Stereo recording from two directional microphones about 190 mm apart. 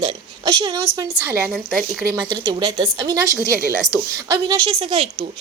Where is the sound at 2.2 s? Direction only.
20° right (ahead or behind).